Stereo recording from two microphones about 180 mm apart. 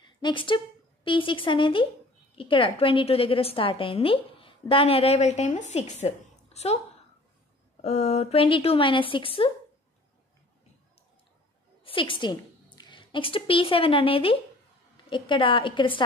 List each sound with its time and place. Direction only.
0.2 s a woman's voice: 25° left (ahead or behind)
7.8 s a woman's voice: 35° left (ahead or behind)
11.8 s a woman's voice: 30° left (ahead or behind)